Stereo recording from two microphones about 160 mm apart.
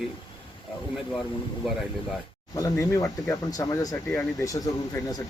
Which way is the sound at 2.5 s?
20° left (ahead or behind).